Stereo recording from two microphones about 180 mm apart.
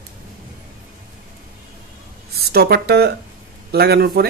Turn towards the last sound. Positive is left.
turn(degrees=-60)  # may be behind; listen again after turning